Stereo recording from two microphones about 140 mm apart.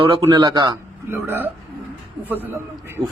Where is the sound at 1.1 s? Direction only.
15° right (ahead or behind).